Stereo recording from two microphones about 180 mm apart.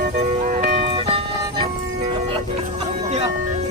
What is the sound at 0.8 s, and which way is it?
Music, 30° right (ahead or behind).